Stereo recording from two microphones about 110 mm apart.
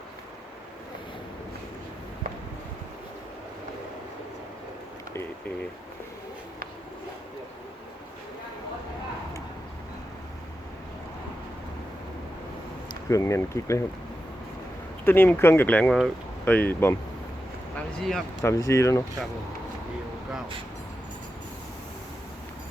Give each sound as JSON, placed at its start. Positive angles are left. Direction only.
{"t": 13.1, "sound": "speech", "side_deg": 25}
{"t": 15.0, "sound": "speech", "side_deg": 20}
{"t": 15.9, "sound": "speech", "side_deg": 0}
{"t": 16.5, "sound": "speech", "side_deg": 15}
{"t": 17.7, "sound": "speech", "side_deg": 5}
{"t": 18.4, "sound": "speech", "side_deg": 30}